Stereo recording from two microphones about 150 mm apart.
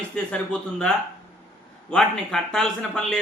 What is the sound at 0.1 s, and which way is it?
Speech, 5° left (ahead or behind).